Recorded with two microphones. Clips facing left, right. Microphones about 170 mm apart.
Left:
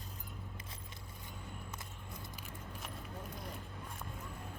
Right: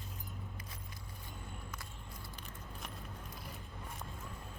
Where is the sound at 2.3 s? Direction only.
10° left (ahead or behind).